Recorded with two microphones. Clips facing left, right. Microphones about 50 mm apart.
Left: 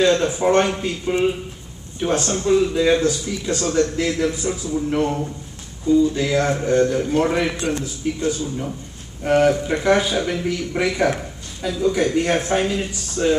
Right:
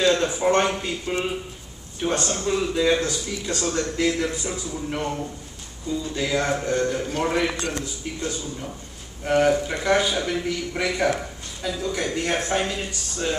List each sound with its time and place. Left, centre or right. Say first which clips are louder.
0.0 s a man's voice: left 3 dB; centre